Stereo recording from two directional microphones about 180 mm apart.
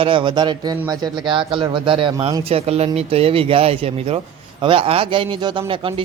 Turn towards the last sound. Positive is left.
turn(degrees=-30)  # may be behind; listen again after turning